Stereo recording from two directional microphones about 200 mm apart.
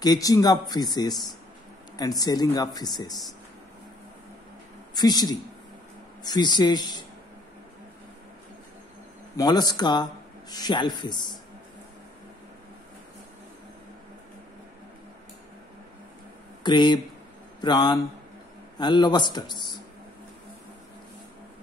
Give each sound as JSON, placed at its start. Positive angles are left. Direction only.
{"t": 0.0, "sound": "speech", "side_deg": 20}
{"t": 4.9, "sound": "speech", "side_deg": 20}
{"t": 9.4, "sound": "speech", "side_deg": 20}
{"t": 16.6, "sound": "speech", "side_deg": 20}